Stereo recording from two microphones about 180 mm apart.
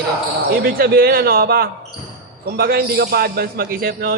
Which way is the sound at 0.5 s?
55° right (ahead or behind).